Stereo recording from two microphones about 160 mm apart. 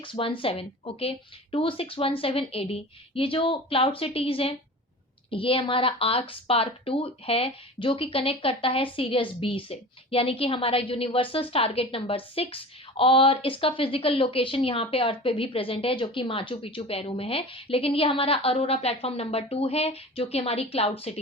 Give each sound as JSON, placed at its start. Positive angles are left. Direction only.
{"t": 0.0, "sound": "speech", "side_deg": 35}